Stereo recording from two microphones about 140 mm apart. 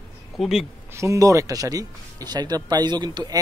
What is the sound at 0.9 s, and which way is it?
Speech, 20° right (ahead or behind).